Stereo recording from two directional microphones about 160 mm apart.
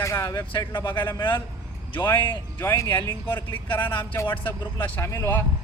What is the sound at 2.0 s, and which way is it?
Speech, 15° left (ahead or behind).